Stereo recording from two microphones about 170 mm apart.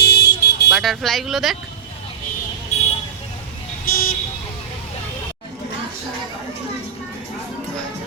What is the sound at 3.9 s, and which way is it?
Vehicle, 60° left (ahead or behind).